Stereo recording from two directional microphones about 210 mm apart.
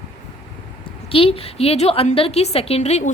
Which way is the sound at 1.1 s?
25° left (ahead or behind).